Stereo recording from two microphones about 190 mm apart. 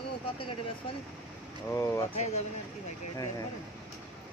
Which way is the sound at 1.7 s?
15° left (ahead or behind).